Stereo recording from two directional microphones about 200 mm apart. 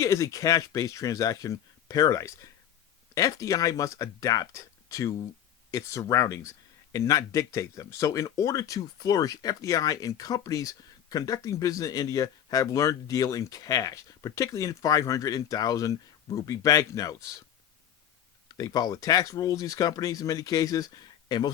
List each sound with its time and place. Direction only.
0.0 s speech: 15° left (ahead or behind)
18.4 s speech: 20° left (ahead or behind)